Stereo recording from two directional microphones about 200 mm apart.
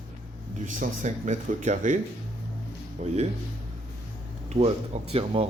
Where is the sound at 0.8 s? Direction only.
35° right (ahead or behind).